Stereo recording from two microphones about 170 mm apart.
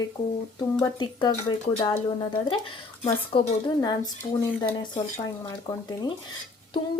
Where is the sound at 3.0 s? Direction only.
30° left (ahead or behind).